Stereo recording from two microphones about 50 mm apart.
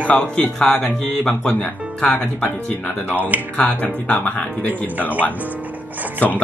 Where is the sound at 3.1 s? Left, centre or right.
Right.